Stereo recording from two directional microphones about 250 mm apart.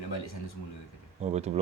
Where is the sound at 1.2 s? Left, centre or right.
Right.